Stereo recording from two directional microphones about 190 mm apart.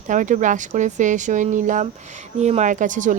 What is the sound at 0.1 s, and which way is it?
Speech, 40° right (ahead or behind).